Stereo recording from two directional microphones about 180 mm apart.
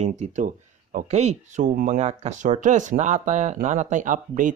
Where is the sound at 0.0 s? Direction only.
40° right (ahead or behind).